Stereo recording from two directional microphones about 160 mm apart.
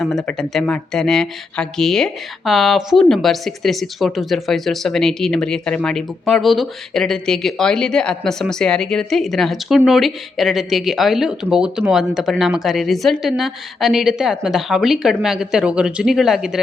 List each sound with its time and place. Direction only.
0.0 s speech: 5° left (ahead or behind)